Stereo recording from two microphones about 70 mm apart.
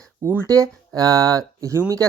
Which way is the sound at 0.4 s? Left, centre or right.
Right.